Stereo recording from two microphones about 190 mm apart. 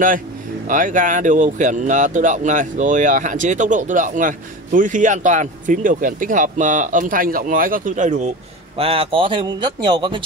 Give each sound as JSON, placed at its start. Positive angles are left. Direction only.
{"t": 0.7, "sound": "speech", "side_deg": -45}
{"t": 8.7, "sound": "speech", "side_deg": -30}